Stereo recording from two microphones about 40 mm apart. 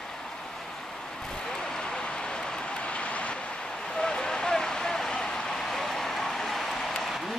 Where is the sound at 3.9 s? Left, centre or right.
Centre.